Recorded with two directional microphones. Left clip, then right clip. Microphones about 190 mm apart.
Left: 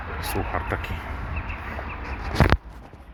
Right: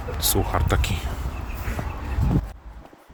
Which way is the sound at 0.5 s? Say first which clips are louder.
Right 3 dB; 40° right (ahead or behind).